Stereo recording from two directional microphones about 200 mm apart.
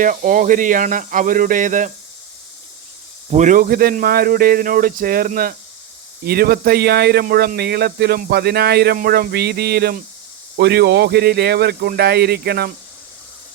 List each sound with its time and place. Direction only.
0.0 s speech: 45° right (ahead or behind)
3.2 s speech: 35° right (ahead or behind)